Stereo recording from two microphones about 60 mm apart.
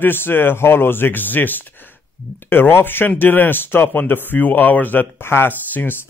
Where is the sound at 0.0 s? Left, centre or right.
Left.